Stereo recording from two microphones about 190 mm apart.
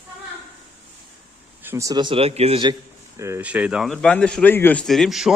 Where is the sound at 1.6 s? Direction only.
15° right (ahead or behind); by 2.7 s 30° right (ahead or behind).